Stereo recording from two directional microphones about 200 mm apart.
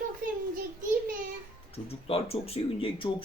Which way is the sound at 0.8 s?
40° right (ahead or behind).